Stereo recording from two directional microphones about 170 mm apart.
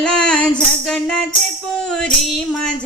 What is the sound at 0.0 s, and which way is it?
Music, 5° left (ahead or behind).